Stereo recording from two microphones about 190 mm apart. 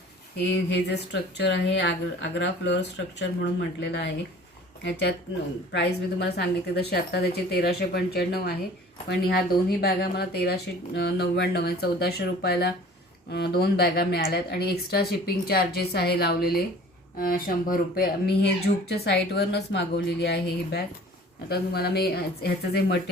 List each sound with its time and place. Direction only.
0.3 s speech: 60° left (ahead or behind)
3.2 s speech: 65° left (ahead or behind)